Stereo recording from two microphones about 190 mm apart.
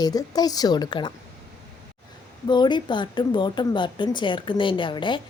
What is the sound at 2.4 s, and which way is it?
Speech, 25° left (ahead or behind).